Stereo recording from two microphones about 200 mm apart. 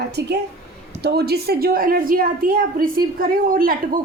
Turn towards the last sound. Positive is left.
turn(degrees=-45)  # may be behind; listen again after turning